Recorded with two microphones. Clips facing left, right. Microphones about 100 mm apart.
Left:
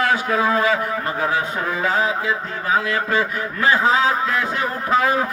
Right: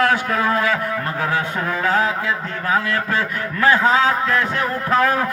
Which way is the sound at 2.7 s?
10° left (ahead or behind).